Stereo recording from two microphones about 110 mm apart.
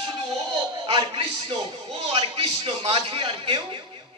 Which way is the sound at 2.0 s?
65° right (ahead or behind).